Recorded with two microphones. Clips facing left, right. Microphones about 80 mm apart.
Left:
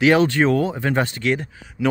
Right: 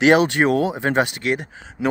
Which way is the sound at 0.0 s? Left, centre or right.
Right.